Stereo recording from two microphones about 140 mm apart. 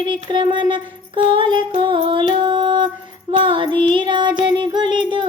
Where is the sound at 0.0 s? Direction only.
35° right (ahead or behind).